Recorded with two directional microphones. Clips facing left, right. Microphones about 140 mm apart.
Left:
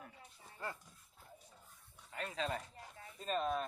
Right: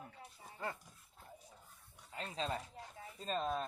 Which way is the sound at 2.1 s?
30° right (ahead or behind).